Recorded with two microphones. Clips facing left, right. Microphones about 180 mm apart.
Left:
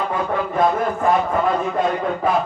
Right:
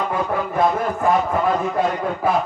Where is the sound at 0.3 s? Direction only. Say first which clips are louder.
Left 2 dB; 5° right (ahead or behind).